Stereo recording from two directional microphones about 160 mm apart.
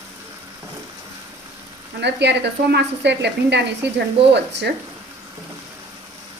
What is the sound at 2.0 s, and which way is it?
Speech, 90° right.